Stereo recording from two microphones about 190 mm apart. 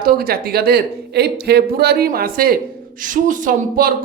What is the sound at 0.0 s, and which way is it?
A woman's voice, 50° right (ahead or behind).